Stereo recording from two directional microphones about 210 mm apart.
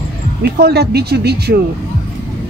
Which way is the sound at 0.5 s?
50° right (ahead or behind).